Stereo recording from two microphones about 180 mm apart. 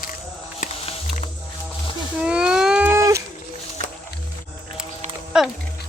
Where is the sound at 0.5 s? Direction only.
40° left (ahead or behind).